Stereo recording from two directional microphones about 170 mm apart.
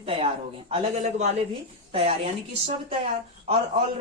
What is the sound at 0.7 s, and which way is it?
A woman's voice, 40° right (ahead or behind).